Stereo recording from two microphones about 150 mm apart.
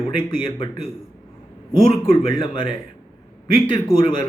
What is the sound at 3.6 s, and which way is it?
Speech, 30° left (ahead or behind).